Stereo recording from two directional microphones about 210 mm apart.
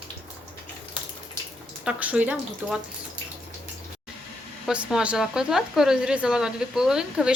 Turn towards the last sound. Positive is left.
turn(degrees=-5)  # may be behind; listen again after turning